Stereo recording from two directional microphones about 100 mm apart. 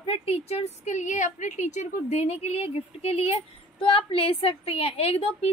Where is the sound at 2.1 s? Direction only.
90° left.